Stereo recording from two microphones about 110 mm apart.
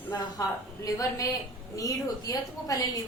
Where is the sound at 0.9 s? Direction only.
30° left (ahead or behind).